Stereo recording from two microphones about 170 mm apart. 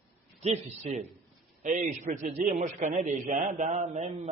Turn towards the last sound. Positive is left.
turn(degrees=-45)  # may be behind; listen again after turning